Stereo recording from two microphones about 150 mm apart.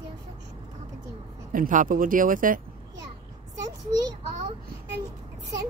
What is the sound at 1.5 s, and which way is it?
Speech, 60° right (ahead or behind).